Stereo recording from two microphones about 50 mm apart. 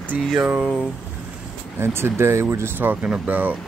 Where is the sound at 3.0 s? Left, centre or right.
Right.